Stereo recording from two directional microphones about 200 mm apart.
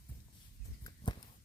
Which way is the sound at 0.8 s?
20° left (ahead or behind).